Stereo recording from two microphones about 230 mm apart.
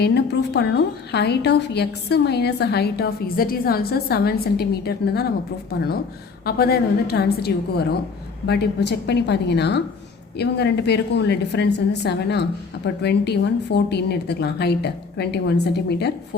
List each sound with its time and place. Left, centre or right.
0.0 s a woman's voice: left
6.4 s a woman's voice: left